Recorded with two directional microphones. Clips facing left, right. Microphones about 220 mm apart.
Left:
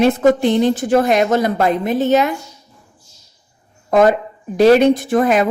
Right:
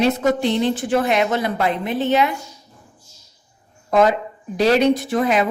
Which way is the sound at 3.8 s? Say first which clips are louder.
Left 4 dB; 50° left (ahead or behind).